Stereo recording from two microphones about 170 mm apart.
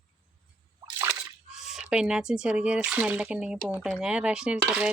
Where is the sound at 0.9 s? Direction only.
20° right (ahead or behind).